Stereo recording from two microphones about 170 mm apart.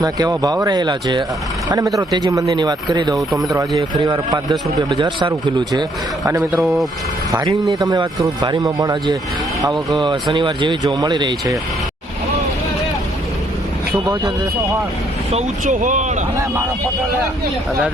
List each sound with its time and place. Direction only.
0.0 s speech: 25° right (ahead or behind)
6.6 s speech: centre (ahead or behind)
7.3 s speech: 20° right (ahead or behind)
13.9 s speech: 15° right (ahead or behind)
15.3 s speech: 45° right (ahead or behind)